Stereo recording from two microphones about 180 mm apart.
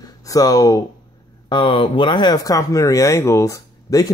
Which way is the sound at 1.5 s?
30° left (ahead or behind).